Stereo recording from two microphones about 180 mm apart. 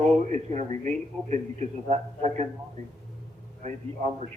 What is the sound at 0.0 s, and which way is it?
A man's voice, 40° right (ahead or behind).